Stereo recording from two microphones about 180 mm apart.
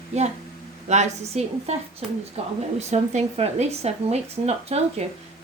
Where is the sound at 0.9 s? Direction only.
40° right (ahead or behind).